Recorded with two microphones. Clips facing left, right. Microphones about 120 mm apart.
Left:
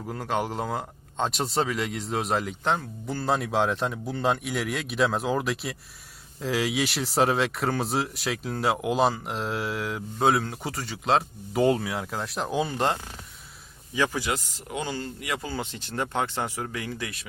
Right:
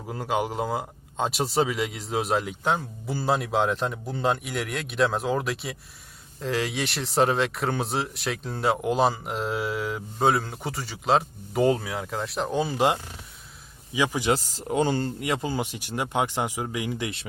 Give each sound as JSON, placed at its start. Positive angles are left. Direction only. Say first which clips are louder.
{"t": 0.0, "sound": "speech", "louder": "right 1 dB", "side_deg": -5}
{"t": 13.9, "sound": "speech", "louder": "right 1 dB", "side_deg": -15}
{"t": 14.3, "sound": "speech", "louder": "right 6 dB", "side_deg": -30}